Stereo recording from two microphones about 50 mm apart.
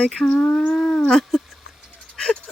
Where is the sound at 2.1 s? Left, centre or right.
Centre.